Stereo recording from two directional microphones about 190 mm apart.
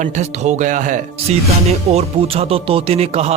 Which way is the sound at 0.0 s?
35° right (ahead or behind).